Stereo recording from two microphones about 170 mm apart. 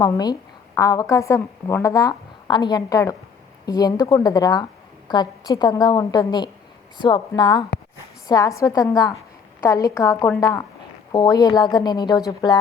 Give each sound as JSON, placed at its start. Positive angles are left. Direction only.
{"t": 0.0, "sound": "a woman's voice", "side_deg": 20}